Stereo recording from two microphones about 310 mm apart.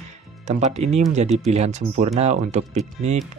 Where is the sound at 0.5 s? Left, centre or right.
Right.